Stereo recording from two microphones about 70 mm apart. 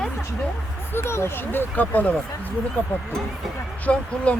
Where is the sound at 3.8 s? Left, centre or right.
Centre.